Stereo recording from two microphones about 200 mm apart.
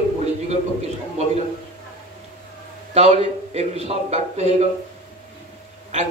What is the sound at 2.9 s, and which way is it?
Speech, 30° right (ahead or behind).